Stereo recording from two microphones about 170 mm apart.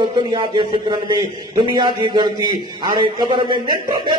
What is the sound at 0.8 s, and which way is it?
Music, 25° right (ahead or behind).